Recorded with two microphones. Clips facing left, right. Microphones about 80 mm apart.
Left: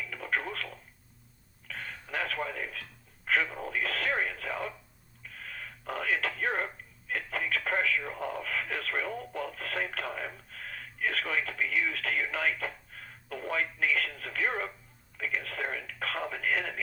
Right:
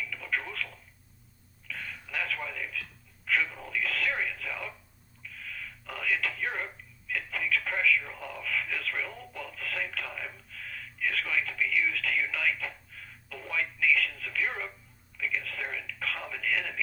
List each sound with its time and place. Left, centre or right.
0.0 s telephone: left
1.6 s radio: left
3.2 s speech: left
5.2 s telephone: left
15.2 s a sound: left